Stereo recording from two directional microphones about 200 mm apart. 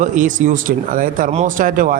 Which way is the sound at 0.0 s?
40° right (ahead or behind).